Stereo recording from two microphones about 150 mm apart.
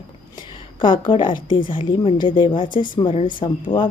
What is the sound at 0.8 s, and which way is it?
Speech, 35° left (ahead or behind).